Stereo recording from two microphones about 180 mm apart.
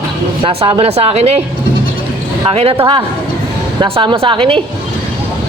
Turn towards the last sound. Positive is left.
turn(degrees=-30)  # may be behind; listen again after turning